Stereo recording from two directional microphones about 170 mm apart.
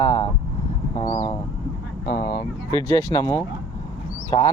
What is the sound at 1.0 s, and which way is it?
Speech, 40° left (ahead or behind).